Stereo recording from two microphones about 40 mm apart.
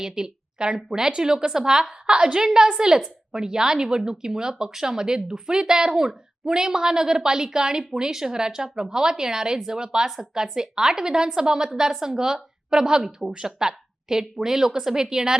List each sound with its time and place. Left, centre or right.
0.0 s speech: centre